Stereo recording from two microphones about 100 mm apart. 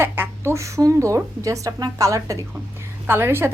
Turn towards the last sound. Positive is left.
turn(degrees=-25)  # may be behind; listen again after turning